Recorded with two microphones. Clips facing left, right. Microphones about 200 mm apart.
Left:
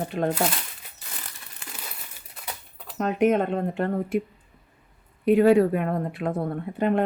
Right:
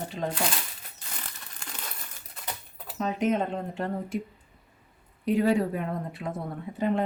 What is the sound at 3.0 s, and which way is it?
Speech, 60° left (ahead or behind).